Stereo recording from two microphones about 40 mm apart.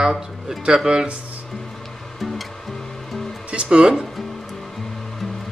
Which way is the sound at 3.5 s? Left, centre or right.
Right.